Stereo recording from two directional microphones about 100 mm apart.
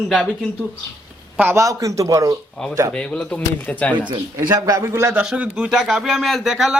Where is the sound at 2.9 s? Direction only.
10° left (ahead or behind).